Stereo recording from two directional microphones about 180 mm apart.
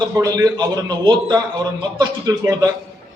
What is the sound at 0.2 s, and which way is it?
A man's voice, 20° right (ahead or behind).